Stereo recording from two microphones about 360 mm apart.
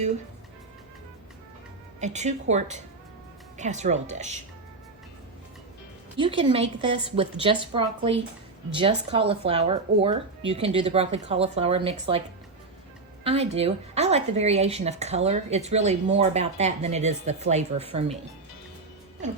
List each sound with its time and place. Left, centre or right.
2.0 s a woman's voice: centre
6.1 s speech: centre
13.2 s speech: centre
19.2 s a woman's voice: centre